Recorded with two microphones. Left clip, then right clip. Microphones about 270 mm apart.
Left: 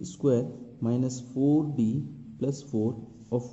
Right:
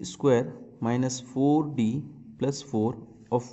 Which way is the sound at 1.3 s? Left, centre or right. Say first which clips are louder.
Right 1 dB; right.